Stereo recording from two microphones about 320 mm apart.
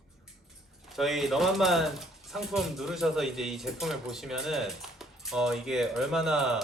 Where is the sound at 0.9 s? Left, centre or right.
Centre.